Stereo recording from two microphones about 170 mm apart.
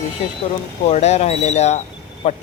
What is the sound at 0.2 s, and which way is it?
Speech, 35° left (ahead or behind).